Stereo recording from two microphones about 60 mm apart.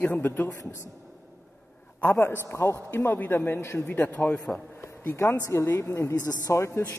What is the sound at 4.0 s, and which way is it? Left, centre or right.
Speech, left.